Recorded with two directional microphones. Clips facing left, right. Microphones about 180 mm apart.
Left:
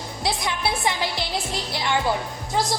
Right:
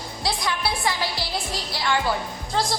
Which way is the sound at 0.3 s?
20° left (ahead or behind).